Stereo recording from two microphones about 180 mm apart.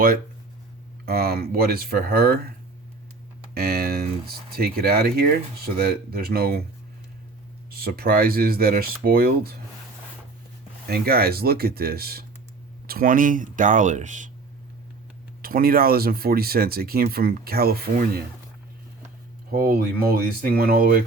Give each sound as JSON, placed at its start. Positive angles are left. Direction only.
{"t": 1.0, "sound": "speech", "side_deg": -60}
{"t": 3.5, "sound": "speech", "side_deg": -55}
{"t": 7.7, "sound": "speech", "side_deg": -60}
{"t": 10.8, "sound": "speech", "side_deg": -55}
{"t": 15.4, "sound": "speech", "side_deg": -55}
{"t": 19.5, "sound": "speech", "side_deg": -55}